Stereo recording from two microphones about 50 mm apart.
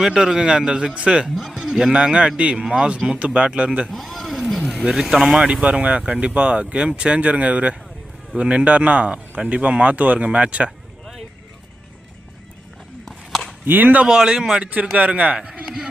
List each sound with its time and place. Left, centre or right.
0.0 s speech: centre
1.4 s speech: centre
3.2 s speech: right
3.8 s a sound: centre
4.7 s speech: centre
13.1 s a sound: centre
13.7 s speech: right
14.1 s speech: centre
14.9 s speech: right
15.6 s a sound: centre